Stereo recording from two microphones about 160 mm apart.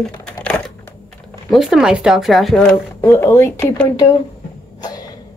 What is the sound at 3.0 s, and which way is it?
Speech, 15° left (ahead or behind).